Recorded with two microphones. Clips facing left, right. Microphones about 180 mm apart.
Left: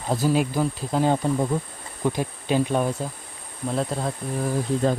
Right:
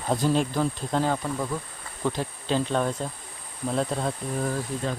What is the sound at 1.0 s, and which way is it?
Speech, 25° left (ahead or behind).